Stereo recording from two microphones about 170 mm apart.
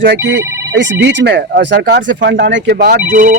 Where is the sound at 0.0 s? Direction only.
90° right; by 3.0 s 70° right (ahead or behind).